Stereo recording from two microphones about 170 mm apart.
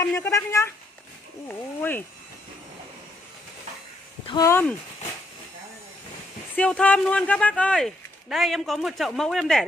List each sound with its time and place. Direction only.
0.0 s speech: 15° left (ahead or behind)
4.3 s speech: 20° left (ahead or behind)
6.5 s speech: 5° left (ahead or behind)